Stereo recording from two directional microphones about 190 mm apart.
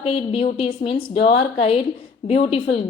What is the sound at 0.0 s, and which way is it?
A woman's voice, 30° left (ahead or behind).